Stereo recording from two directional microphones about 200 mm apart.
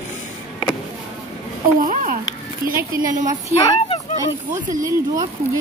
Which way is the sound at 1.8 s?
40° right (ahead or behind).